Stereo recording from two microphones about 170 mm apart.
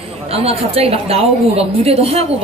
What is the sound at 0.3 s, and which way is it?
A woman's voice, 35° right (ahead or behind).